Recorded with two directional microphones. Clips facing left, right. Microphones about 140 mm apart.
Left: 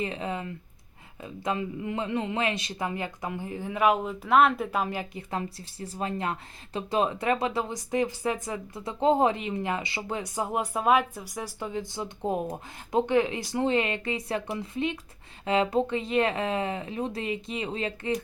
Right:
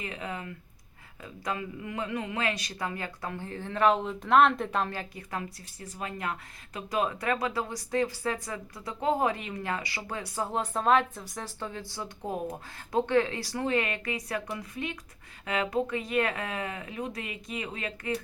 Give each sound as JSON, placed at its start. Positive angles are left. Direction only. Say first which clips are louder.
{"t": 0.0, "sound": "speech", "louder": "left 5 dB", "side_deg": 30}